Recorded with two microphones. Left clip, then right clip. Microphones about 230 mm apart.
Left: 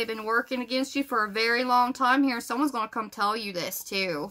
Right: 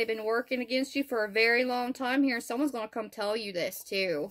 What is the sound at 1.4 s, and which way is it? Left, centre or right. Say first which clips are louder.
Speech: left 3 dB; left.